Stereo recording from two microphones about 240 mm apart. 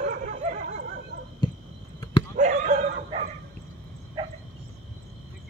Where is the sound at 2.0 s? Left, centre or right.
Left.